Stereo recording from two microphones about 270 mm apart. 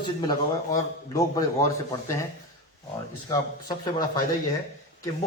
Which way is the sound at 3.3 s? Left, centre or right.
Centre.